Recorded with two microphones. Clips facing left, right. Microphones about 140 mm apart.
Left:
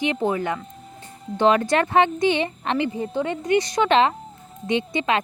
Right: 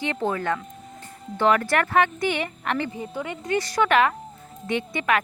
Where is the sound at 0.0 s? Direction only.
15° left (ahead or behind).